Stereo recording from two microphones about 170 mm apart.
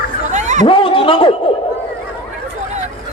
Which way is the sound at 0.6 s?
30° left (ahead or behind).